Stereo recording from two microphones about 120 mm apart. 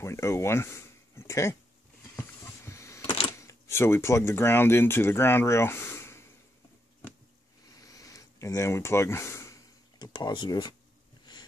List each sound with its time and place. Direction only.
0.0 s speech: 25° left (ahead or behind)
2.1 s power windows: 20° left (ahead or behind)
3.3 s speech: 25° left (ahead or behind)
7.7 s a sound: 30° left (ahead or behind)
9.9 s speech: 35° left (ahead or behind)